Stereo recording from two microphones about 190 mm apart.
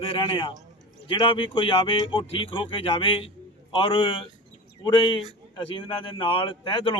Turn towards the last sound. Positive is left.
turn(degrees=25)  # may be behind; listen again after turning